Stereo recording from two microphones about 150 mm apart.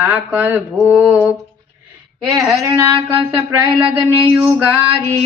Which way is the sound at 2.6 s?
25° right (ahead or behind).